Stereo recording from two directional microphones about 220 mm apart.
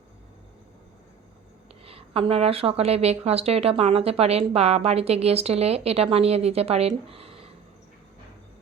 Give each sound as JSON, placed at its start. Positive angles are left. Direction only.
{"t": 1.8, "sound": "a woman's voice", "side_deg": -25}